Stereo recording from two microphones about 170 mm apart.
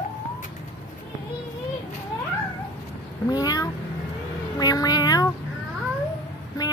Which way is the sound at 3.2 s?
20° left (ahead or behind).